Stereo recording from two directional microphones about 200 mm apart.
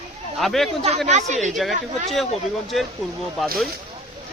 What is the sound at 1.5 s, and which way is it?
Speech, centre (ahead or behind).